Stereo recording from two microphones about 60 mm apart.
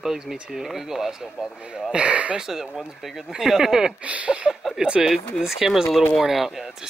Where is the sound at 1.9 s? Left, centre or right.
Right.